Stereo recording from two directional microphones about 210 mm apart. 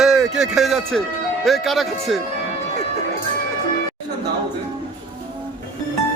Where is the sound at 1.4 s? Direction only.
Centre (ahead or behind).